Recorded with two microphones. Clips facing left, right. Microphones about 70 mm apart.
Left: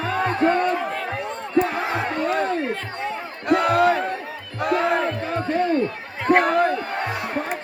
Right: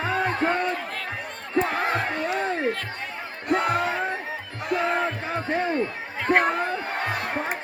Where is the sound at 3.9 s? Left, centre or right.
Right.